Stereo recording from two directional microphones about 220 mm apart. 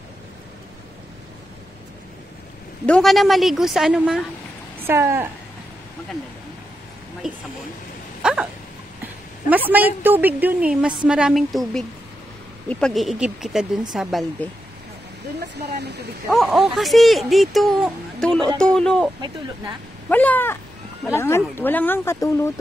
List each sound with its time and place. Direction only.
2.9 s speech: centre (ahead or behind)
8.2 s dog: 5° right (ahead or behind)
9.7 s speech: 10° right (ahead or behind)
15.4 s speech: 50° right (ahead or behind)
16.3 s speech: centre (ahead or behind)
20.1 s speech: 10° left (ahead or behind)